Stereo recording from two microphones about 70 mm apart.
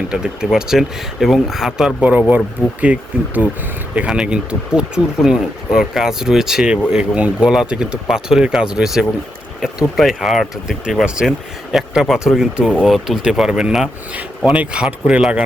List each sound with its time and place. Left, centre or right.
0.1 s speech: centre
2.0 s speech: right; by 10.8 s centre
10.8 s speech: centre